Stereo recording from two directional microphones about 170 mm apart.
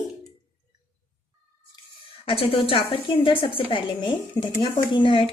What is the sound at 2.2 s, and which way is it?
Speech, 35° left (ahead or behind).